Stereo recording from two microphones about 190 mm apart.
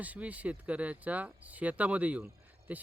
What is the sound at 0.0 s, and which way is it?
Speech, 10° right (ahead or behind).